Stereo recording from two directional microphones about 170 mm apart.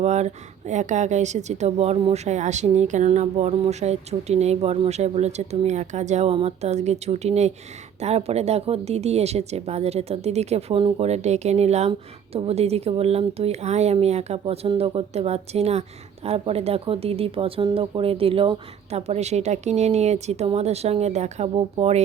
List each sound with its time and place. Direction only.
0.0 s speech: 40° right (ahead or behind)